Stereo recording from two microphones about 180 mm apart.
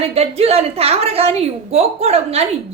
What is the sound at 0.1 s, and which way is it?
A woman's voice, 35° right (ahead or behind).